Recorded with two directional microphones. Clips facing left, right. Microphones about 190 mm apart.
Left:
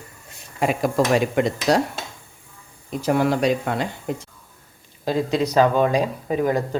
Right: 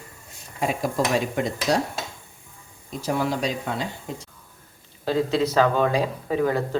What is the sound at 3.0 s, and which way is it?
Speech, 60° left (ahead or behind).